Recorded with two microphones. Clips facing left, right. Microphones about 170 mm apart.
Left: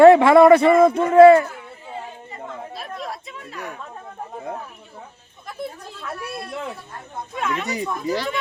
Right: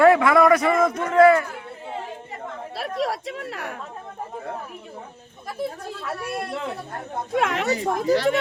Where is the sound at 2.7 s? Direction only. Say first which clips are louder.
Right 6 dB; 80° right.